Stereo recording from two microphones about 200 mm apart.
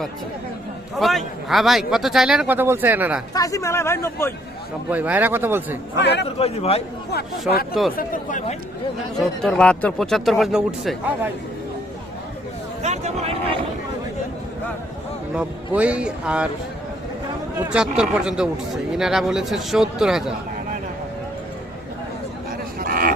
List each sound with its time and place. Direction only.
0.9 s speech: centre (ahead or behind)
3.3 s speech: 15° left (ahead or behind)
4.9 s speech: 10° right (ahead or behind)
6.0 s a man's voice: 60° left (ahead or behind)
6.4 s speech: 30° left (ahead or behind)
7.9 s speech: 40° left (ahead or behind)
9.1 s speech: centre (ahead or behind)
12.8 s a sound: 35° right (ahead or behind)
15.4 s speech: 5° right (ahead or behind)
17.6 s speech: 5° right (ahead or behind)
22.8 s a sound: 45° right (ahead or behind)